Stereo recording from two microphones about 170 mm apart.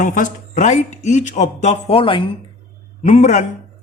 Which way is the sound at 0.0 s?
50° left (ahead or behind).